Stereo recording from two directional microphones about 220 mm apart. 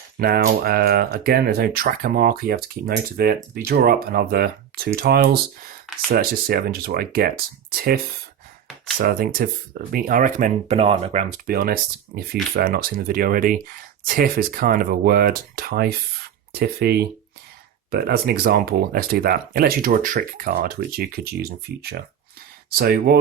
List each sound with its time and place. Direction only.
0.2 s speech: 45° right (ahead or behind)
9.0 s speech: 40° right (ahead or behind)